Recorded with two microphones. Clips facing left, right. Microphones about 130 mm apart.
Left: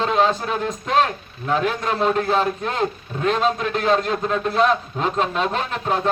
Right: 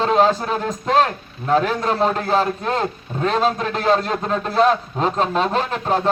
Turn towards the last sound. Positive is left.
turn(degrees=-35)  # may be behind; listen again after turning